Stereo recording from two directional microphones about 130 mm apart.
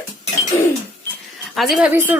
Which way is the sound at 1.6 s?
5° right (ahead or behind).